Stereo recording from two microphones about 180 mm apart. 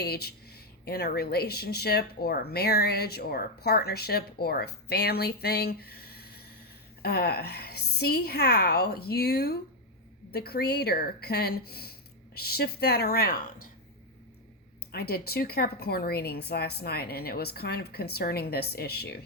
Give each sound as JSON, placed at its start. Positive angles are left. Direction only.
{"t": 0.0, "sound": "speech", "side_deg": 60}
{"t": 14.9, "sound": "speech", "side_deg": 60}